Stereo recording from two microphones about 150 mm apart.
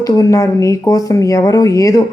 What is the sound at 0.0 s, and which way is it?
Speech, 25° left (ahead or behind).